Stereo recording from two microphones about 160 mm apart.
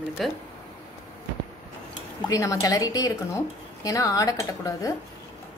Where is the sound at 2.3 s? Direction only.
20° left (ahead or behind).